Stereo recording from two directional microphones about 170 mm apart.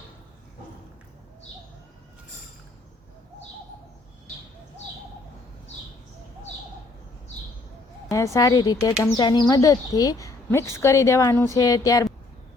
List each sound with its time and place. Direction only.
8.1 s speech: 20° left (ahead or behind)